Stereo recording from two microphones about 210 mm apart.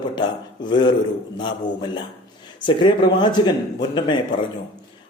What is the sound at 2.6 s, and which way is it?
Speech, 20° left (ahead or behind).